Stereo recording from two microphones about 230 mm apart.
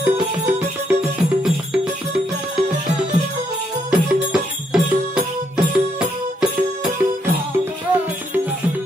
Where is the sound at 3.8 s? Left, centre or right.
Centre.